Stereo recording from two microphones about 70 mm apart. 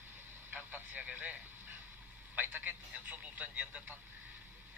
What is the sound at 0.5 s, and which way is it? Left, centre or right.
A man's voice, right.